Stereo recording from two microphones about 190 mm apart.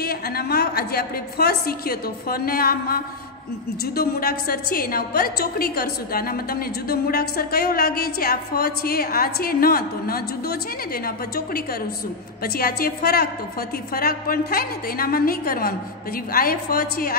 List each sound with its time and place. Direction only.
0.0 s a woman's voice: 55° left (ahead or behind)